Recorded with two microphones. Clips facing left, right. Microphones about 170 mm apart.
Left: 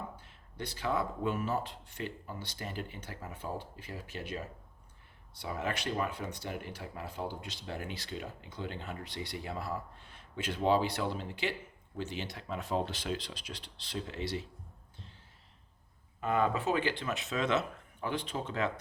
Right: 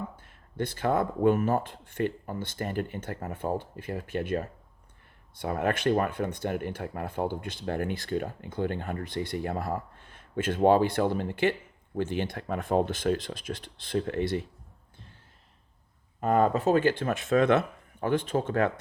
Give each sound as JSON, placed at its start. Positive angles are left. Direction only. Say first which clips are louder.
{"t": 0.2, "sound": "speech", "louder": "right 10 dB", "side_deg": -50}
{"t": 16.2, "sound": "speech", "louder": "right 7 dB", "side_deg": -45}